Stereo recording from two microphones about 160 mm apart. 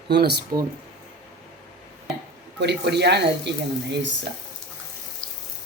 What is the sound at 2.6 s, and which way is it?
Speech, 90° right.